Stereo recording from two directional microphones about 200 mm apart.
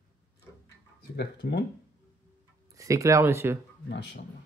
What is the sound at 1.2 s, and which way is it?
Speech, 55° left (ahead or behind).